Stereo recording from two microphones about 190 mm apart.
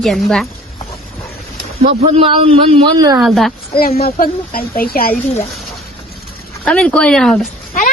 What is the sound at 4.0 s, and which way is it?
Speech, 50° left (ahead or behind).